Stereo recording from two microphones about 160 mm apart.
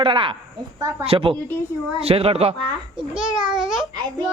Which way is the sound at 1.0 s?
35° right (ahead or behind).